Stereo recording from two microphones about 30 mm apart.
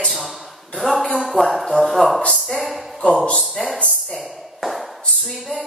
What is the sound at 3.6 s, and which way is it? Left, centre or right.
Speech, centre.